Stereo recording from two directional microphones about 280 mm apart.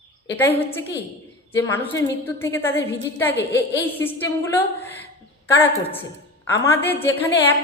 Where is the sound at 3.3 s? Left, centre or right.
Left.